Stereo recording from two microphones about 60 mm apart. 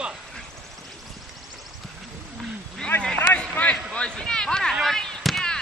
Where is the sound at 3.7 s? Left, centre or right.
Centre.